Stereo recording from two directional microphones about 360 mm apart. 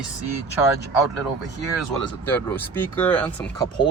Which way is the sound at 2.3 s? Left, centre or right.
Centre.